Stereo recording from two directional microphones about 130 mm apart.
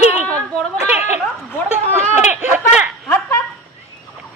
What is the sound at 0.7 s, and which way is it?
Speech, 15° right (ahead or behind).